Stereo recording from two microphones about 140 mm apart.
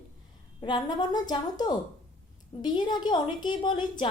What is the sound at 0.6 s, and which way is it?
A woman's voice, 35° left (ahead or behind).